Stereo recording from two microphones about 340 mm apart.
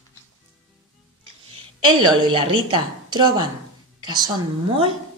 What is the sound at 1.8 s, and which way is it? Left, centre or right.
A woman's voice, centre.